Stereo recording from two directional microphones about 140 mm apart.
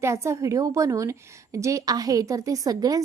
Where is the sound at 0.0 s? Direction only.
20° right (ahead or behind).